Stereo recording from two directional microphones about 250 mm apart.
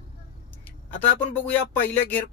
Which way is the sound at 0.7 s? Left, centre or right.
Centre.